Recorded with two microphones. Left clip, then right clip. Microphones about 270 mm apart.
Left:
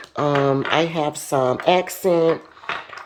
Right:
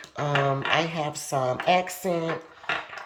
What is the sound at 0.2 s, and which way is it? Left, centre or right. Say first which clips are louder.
Speech: left 6 dB; left.